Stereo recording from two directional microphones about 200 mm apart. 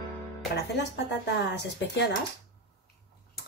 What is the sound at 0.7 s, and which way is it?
Speech, 60° left (ahead or behind).